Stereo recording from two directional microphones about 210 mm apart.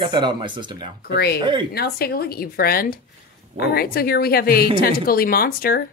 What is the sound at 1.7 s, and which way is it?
A woman's voice, 50° left (ahead or behind).